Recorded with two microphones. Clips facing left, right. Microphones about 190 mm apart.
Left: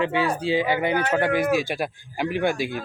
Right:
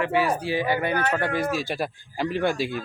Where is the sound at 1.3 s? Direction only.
55° left (ahead or behind).